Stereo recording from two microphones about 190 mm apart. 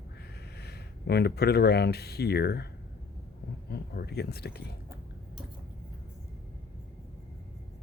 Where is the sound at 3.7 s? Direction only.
60° left (ahead or behind).